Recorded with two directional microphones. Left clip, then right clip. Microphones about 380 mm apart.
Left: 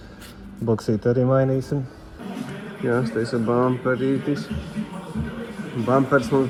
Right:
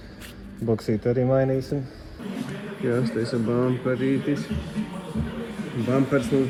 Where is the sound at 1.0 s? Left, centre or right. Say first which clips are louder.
Left 2 dB; left.